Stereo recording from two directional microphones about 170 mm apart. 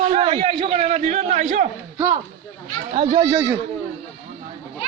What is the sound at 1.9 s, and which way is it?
Speech, 15° right (ahead or behind).